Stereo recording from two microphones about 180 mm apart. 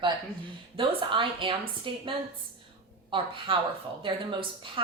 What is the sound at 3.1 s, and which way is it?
A woman's voice, 30° right (ahead or behind).